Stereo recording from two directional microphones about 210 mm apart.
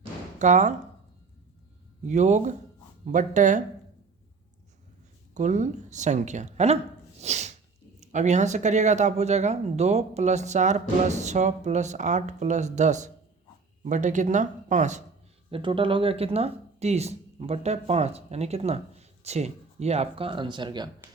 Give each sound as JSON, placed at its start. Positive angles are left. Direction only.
{"t": 0.0, "sound": "a sound", "side_deg": -35}
{"t": 2.0, "sound": "speech", "side_deg": -35}
{"t": 5.3, "sound": "speech", "side_deg": -35}
{"t": 7.2, "sound": "sneeze", "side_deg": -30}
{"t": 8.0, "sound": "speech", "side_deg": -35}